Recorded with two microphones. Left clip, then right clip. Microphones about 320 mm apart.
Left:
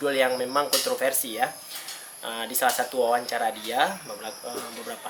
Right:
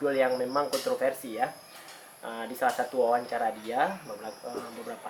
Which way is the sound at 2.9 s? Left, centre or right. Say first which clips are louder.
Left 2 dB; right.